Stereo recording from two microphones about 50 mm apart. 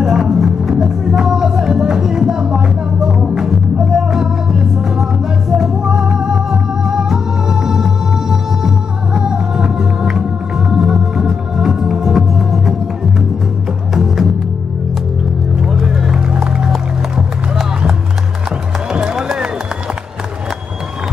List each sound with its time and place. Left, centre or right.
0.0 s music: centre
13.9 s music: centre
15.6 s music: centre
18.9 s music: centre